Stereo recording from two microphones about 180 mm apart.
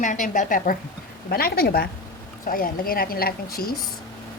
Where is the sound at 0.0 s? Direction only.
45° left (ahead or behind).